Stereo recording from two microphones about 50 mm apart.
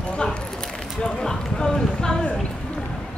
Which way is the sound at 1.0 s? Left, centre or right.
Centre.